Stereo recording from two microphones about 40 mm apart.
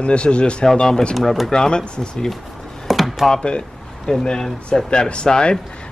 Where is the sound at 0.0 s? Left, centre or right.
Left.